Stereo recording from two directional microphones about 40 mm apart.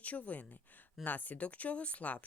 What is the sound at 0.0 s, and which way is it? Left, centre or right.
Speech, left.